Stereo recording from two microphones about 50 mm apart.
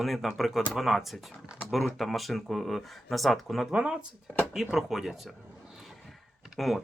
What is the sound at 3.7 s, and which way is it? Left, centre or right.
Speech, right.